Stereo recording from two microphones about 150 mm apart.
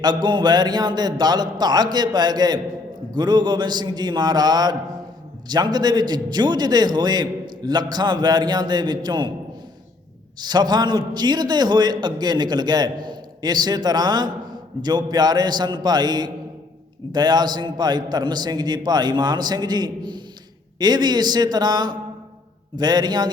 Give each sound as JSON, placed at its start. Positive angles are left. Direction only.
{"t": 0.0, "sound": "a man's voice", "side_deg": -30}
{"t": 10.4, "sound": "a man's voice", "side_deg": -25}